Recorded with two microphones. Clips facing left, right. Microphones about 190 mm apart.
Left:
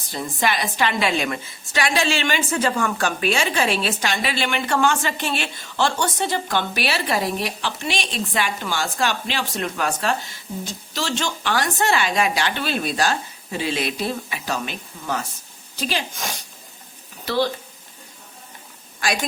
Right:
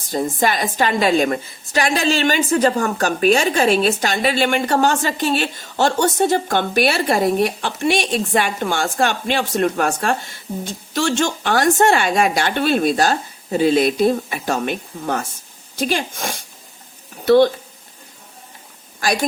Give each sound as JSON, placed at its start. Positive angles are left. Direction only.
{"t": 0.1, "sound": "a woman's voice", "side_deg": -45}